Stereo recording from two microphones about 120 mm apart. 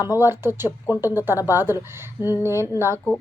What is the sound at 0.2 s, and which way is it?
A woman's voice, 20° right (ahead or behind).